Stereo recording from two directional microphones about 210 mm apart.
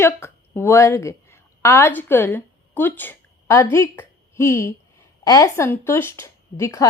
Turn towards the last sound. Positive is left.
turn(degrees=15)  # may be behind; listen again after turning